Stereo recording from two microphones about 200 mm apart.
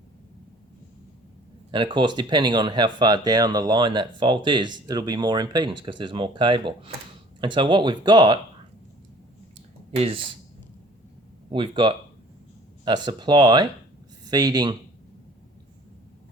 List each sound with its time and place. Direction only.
1.7 s speech: 25° right (ahead or behind)
9.9 s speech: 30° right (ahead or behind)
11.5 s speech: 25° right (ahead or behind)